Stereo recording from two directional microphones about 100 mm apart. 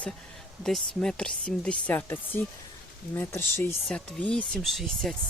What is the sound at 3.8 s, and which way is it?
Speech, 10° left (ahead or behind).